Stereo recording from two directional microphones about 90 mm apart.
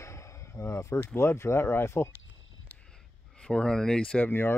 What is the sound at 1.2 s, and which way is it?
Speech, 30° left (ahead or behind).